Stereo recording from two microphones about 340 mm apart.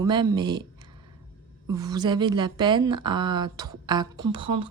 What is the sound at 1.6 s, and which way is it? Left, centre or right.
Speech, centre.